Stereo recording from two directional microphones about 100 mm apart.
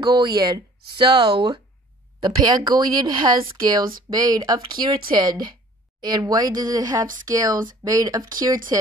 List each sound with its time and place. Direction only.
0.0 s speech: 40° right (ahead or behind)